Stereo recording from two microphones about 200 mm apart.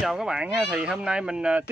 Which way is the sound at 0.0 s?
5° right (ahead or behind).